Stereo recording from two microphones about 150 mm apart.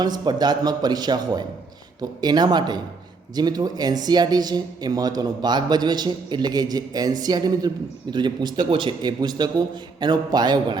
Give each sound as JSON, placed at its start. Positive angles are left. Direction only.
{"t": 0.0, "sound": "speech", "side_deg": -25}